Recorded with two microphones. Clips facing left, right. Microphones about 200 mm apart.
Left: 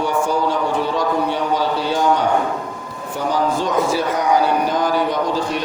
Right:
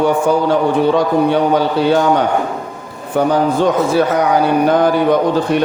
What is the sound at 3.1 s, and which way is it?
Speech, 55° right (ahead or behind).